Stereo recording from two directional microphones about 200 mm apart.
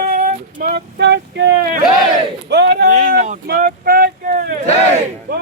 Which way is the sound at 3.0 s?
40° right (ahead or behind).